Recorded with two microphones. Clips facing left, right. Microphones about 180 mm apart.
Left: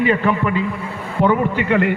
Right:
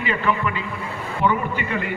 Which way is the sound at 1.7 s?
75° left (ahead or behind).